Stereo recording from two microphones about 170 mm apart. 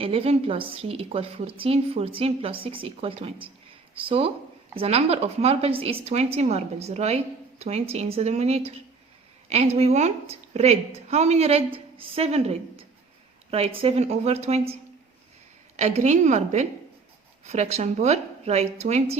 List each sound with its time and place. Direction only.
0.0 s a woman's voice: 35° right (ahead or behind)